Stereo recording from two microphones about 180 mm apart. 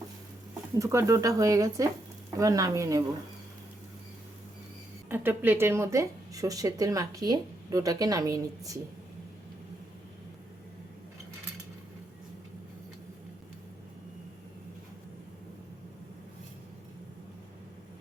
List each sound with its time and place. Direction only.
0.8 s speech: 15° right (ahead or behind)
5.0 s speech: 10° right (ahead or behind)